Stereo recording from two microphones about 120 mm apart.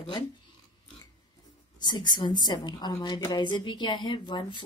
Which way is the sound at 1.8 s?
35° left (ahead or behind).